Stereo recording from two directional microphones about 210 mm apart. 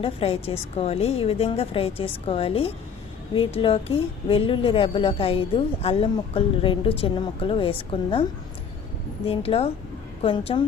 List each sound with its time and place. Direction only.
0.0 s a woman's voice: 25° left (ahead or behind)